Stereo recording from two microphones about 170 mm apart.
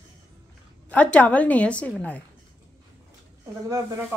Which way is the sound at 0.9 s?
10° left (ahead or behind).